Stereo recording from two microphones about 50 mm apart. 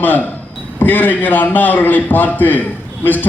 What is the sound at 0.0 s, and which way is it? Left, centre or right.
A man's voice, left.